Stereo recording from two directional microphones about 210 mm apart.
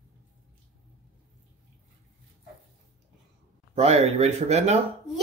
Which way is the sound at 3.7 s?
30° right (ahead or behind).